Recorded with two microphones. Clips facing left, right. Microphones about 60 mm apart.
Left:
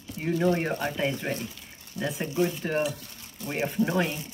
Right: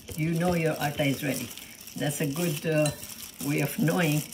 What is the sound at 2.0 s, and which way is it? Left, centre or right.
Speech, left.